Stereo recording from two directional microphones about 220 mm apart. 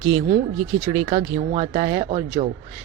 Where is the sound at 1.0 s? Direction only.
30° right (ahead or behind).